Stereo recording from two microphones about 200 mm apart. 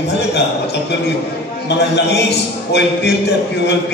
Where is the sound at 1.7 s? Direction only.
60° left (ahead or behind).